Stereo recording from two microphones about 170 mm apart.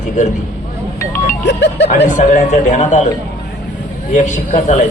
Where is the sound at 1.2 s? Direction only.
80° left.